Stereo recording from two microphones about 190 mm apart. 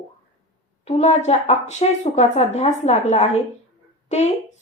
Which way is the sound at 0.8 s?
35° left (ahead or behind).